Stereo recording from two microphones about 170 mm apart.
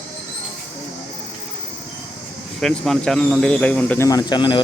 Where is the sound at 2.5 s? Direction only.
5° left (ahead or behind).